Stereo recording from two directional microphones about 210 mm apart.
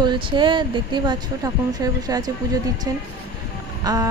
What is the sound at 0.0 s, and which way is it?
Speech, 20° right (ahead or behind).